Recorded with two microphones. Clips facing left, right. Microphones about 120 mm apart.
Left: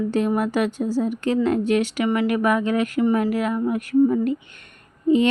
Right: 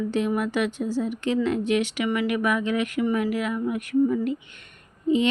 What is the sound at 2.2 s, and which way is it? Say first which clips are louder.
Speech: left 4 dB; 40° left (ahead or behind).